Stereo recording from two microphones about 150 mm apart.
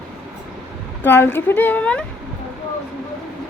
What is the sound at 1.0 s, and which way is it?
Speech, 15° left (ahead or behind).